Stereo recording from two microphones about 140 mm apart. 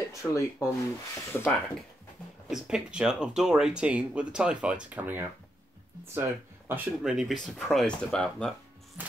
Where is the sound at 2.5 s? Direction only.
5° right (ahead or behind).